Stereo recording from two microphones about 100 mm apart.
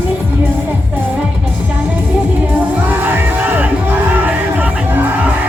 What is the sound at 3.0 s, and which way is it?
Music, 20° right (ahead or behind).